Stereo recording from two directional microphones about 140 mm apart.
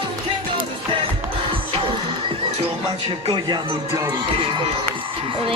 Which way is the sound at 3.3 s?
25° right (ahead or behind).